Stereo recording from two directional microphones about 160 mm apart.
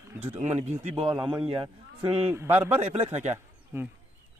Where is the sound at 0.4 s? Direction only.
45° right (ahead or behind).